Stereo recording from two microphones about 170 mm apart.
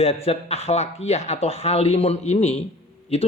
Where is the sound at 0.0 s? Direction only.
35° left (ahead or behind).